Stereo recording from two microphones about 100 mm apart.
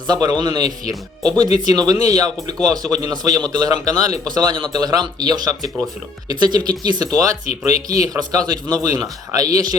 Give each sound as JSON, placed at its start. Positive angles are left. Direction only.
{"t": 0.1, "sound": "speech", "side_deg": -45}